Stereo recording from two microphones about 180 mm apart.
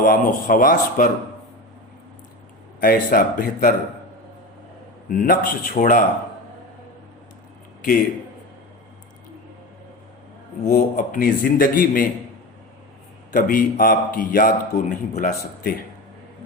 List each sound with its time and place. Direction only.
0.0 s a man's voice: 50° left (ahead or behind)
2.8 s a man's voice: 55° left (ahead or behind)
5.0 s a man's voice: 50° left (ahead or behind)
10.7 s a man's voice: 50° left (ahead or behind)
13.3 s a man's voice: 50° left (ahead or behind)